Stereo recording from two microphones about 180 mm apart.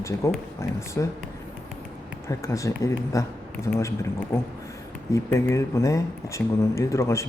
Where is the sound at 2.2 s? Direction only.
15° left (ahead or behind).